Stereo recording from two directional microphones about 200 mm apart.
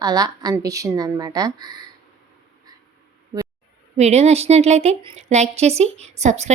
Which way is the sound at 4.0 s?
35° right (ahead or behind).